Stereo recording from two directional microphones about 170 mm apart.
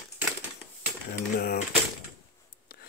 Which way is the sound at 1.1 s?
60° left (ahead or behind).